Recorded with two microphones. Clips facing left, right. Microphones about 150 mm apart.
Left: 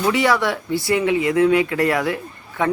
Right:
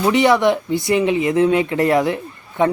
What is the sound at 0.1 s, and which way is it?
Speech, 20° right (ahead or behind).